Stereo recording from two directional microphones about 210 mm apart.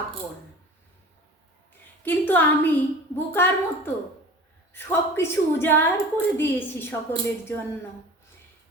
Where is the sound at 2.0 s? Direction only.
10° left (ahead or behind).